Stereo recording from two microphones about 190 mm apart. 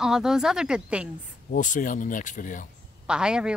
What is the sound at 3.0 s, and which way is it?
Speech, 5° right (ahead or behind).